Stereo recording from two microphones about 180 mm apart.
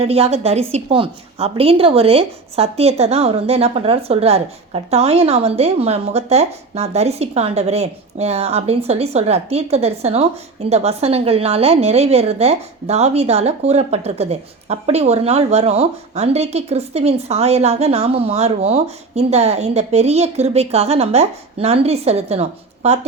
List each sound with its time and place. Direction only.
0.0 s a woman's voice: 35° right (ahead or behind)